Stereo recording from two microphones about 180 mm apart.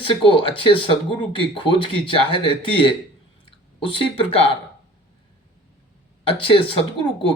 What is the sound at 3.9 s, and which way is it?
Speech, 30° left (ahead or behind).